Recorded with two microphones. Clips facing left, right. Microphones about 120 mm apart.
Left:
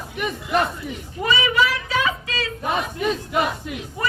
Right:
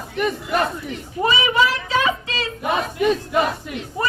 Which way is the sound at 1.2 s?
35° right (ahead or behind).